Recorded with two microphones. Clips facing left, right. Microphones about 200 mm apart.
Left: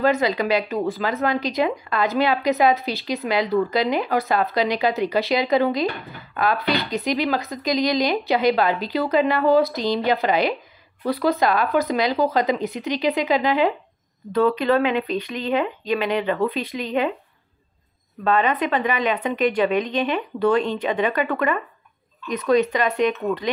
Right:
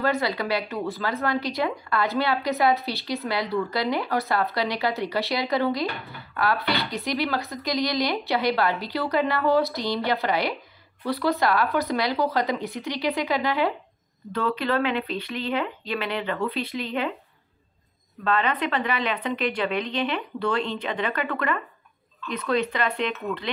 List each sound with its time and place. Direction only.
0.0 s speech: 20° left (ahead or behind)
18.2 s speech: 15° left (ahead or behind)